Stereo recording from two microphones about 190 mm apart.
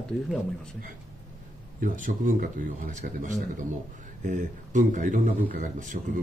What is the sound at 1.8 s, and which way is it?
Speech, 45° right (ahead or behind).